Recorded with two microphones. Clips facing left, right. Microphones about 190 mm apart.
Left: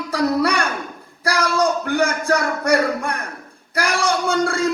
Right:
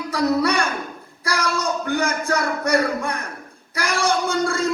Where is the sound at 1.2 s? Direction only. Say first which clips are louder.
Left 5 dB; 60° left (ahead or behind).